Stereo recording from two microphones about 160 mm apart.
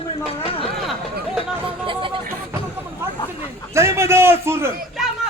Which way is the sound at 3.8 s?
15° right (ahead or behind).